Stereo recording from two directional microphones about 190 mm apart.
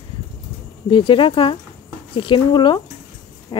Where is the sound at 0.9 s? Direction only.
25° left (ahead or behind).